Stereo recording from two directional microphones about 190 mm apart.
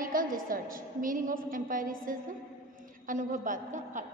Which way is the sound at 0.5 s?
45° right (ahead or behind).